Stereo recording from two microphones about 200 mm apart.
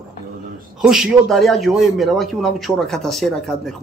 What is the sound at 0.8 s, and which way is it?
Speech, 5° right (ahead or behind).